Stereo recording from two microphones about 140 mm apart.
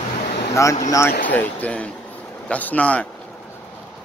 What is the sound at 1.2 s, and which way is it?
Speech, 10° left (ahead or behind).